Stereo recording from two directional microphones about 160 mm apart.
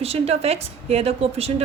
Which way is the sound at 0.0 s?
40° right (ahead or behind).